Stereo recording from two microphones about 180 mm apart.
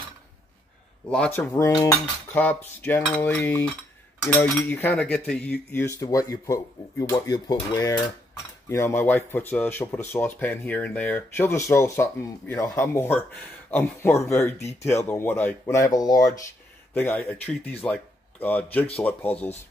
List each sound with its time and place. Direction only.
1.1 s speech: 5° left (ahead or behind)
1.5 s speech: 20° left (ahead or behind)